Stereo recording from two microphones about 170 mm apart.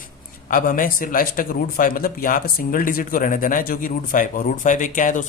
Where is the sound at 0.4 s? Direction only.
55° left (ahead or behind).